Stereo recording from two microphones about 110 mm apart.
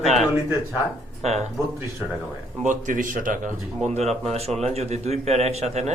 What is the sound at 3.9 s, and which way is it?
A man's voice, 80° right.